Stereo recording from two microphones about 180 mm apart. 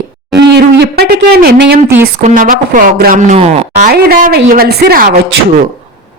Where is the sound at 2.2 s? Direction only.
45° right (ahead or behind).